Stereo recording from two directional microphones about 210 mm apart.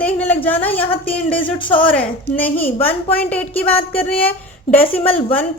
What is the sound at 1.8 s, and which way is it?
A woman's voice, 10° left (ahead or behind).